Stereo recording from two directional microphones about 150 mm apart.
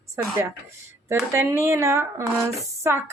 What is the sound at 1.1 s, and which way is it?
Speech, 15° right (ahead or behind).